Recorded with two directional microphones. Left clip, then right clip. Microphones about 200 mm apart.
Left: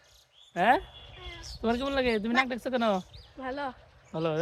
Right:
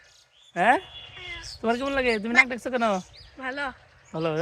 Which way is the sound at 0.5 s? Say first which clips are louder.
Right 3 dB; 30° right (ahead or behind).